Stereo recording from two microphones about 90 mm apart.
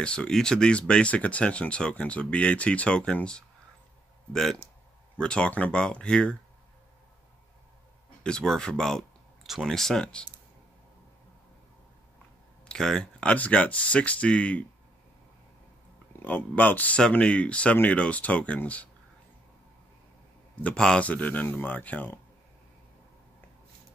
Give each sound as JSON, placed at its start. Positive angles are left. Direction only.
{"t": 0.0, "sound": "speech", "side_deg": 10}
{"t": 8.2, "sound": "speech", "side_deg": 10}
{"t": 12.6, "sound": "speech", "side_deg": 5}
{"t": 16.2, "sound": "speech", "side_deg": 20}
{"t": 20.6, "sound": "speech", "side_deg": 10}